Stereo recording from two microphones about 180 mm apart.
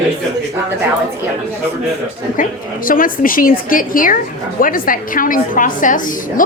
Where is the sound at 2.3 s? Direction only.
50° left (ahead or behind).